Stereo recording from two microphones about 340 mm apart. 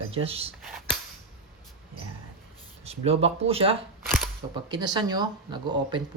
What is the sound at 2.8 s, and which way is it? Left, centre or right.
Speech, centre.